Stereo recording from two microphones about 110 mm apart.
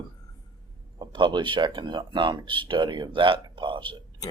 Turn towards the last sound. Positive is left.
turn(degrees=-45)  # may be behind; listen again after turning